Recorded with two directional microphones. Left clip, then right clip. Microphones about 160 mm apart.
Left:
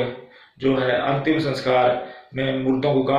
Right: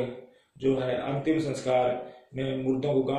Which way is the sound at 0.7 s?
10° right (ahead or behind).